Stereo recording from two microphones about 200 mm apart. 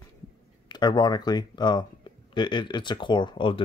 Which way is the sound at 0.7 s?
20° left (ahead or behind).